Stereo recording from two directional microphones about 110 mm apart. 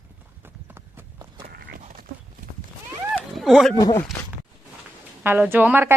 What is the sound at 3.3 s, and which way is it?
Speech, centre (ahead or behind).